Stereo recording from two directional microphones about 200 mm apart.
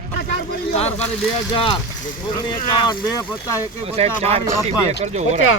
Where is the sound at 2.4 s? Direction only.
20° left (ahead or behind).